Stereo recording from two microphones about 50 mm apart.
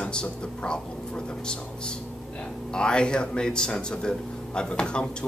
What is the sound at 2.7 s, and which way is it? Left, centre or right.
Speech, centre.